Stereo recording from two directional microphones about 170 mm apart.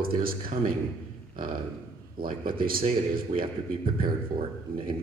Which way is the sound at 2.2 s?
60° right (ahead or behind).